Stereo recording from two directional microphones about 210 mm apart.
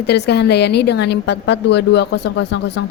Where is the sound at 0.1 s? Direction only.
50° left (ahead or behind).